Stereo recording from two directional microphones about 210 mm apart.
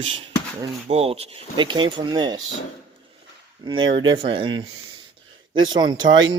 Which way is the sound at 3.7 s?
20° right (ahead or behind).